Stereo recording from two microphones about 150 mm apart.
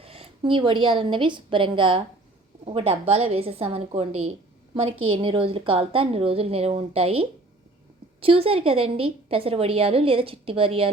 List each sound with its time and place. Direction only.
0.0 s a woman's voice: 40° right (ahead or behind)